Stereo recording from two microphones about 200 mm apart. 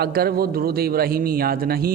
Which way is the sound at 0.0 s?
50° right (ahead or behind).